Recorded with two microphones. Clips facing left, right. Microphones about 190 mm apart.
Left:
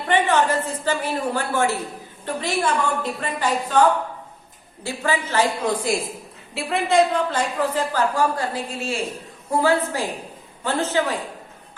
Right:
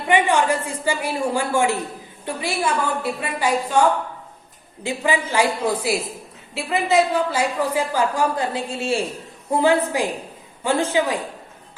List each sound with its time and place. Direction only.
0.1 s a woman's voice: 10° right (ahead or behind)